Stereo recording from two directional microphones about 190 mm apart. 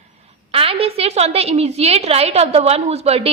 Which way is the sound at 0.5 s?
30° right (ahead or behind).